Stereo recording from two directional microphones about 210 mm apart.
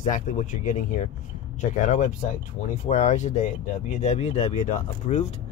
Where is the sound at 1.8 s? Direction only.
35° left (ahead or behind).